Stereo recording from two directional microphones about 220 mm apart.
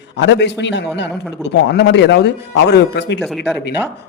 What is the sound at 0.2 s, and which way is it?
A man's voice, 55° left (ahead or behind).